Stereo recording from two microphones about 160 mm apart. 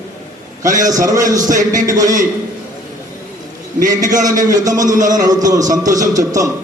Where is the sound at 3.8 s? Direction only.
55° right (ahead or behind).